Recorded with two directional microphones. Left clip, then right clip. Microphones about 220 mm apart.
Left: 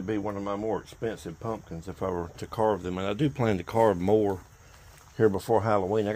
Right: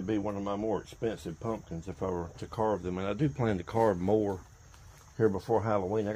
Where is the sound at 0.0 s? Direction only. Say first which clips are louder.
Left 2 dB; 30° left (ahead or behind).